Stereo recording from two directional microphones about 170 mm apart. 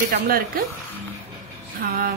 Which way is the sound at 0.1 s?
60° right (ahead or behind).